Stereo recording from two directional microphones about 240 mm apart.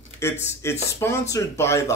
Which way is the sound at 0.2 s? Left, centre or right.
Centre.